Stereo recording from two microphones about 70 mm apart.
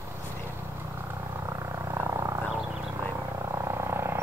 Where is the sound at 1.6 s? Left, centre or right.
Right.